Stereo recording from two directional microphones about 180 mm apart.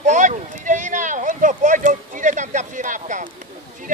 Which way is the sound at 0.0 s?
40° right (ahead or behind).